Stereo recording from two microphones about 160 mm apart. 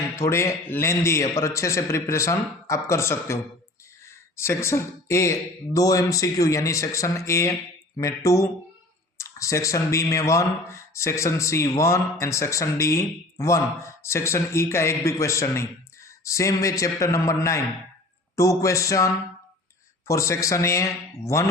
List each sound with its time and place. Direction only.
0.2 s a man's voice: 15° left (ahead or behind)